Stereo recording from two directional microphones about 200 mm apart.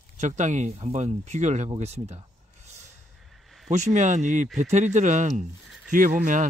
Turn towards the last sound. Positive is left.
turn(degrees=-40)  # may be behind; listen again after turning